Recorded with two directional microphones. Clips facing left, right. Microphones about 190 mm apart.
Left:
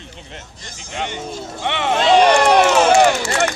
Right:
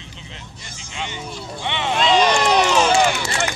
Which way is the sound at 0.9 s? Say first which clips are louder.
Left 5 dB; 55° left (ahead or behind).